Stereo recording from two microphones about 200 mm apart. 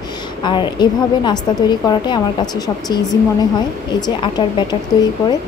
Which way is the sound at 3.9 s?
20° left (ahead or behind).